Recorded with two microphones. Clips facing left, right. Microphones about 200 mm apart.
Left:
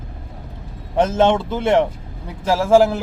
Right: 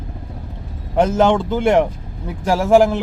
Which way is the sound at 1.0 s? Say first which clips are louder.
Right 1 dB; centre (ahead or behind).